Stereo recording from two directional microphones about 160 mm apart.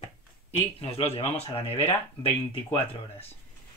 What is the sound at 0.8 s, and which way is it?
Speech, 40° left (ahead or behind).